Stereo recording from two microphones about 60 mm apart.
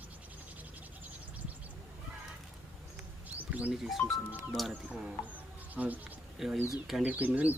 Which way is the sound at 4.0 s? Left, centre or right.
Left.